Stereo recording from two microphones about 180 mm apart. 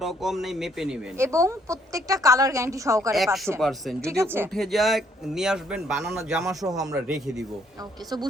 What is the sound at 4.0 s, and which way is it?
Speech, 15° right (ahead or behind).